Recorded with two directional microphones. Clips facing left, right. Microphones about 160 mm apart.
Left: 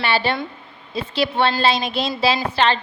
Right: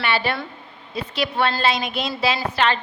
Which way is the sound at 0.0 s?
30° left (ahead or behind).